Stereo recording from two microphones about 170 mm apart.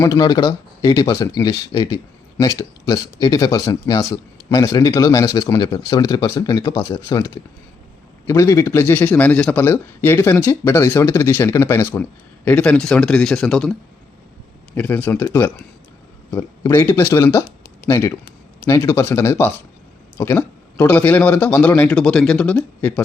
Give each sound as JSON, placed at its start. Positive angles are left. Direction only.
{"t": 0.0, "sound": "a man's voice", "side_deg": 25}
{"t": 14.8, "sound": "a man's voice", "side_deg": 10}